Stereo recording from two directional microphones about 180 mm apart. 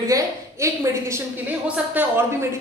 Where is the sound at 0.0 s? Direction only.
15° right (ahead or behind).